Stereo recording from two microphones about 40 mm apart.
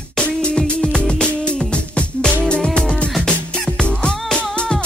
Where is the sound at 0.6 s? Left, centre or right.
Centre.